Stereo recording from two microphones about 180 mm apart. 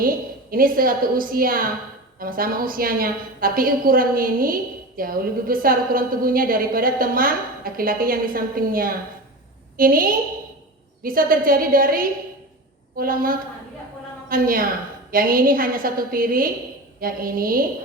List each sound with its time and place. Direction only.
0.5 s a woman's voice: 55° right (ahead or behind)